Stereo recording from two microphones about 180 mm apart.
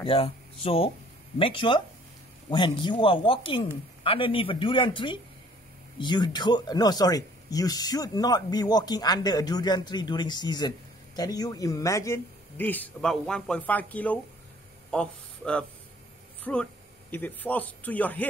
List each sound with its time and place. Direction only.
0.0 s a man's voice: 30° left (ahead or behind); by 18.2 s 10° left (ahead or behind)